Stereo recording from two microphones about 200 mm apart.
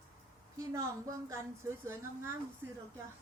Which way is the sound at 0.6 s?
15° right (ahead or behind).